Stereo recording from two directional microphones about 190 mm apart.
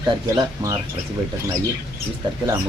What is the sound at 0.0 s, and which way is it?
Speech, 20° right (ahead or behind).